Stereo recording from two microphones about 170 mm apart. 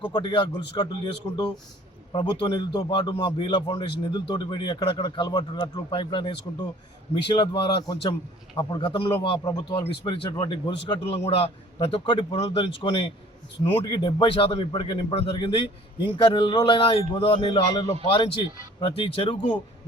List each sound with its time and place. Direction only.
0.0 s a man's voice: 25° left (ahead or behind)